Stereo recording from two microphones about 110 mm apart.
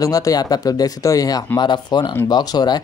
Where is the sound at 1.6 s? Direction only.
40° left (ahead or behind).